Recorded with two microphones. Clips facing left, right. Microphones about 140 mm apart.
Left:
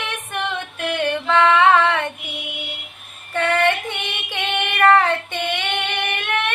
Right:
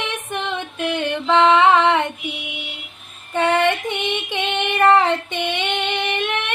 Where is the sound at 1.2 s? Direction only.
20° right (ahead or behind).